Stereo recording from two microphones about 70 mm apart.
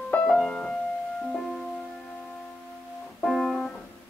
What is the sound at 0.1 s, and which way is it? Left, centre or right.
Music, left.